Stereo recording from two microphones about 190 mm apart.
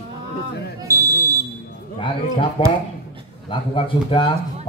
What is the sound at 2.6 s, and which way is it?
Speech, 30° left (ahead or behind).